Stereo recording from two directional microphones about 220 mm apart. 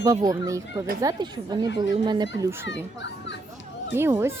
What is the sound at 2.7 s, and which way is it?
Speech, 55° left (ahead or behind).